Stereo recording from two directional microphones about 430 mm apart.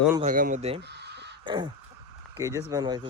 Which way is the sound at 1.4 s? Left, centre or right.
Centre.